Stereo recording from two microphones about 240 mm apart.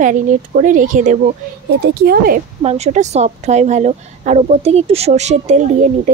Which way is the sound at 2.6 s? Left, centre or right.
Right.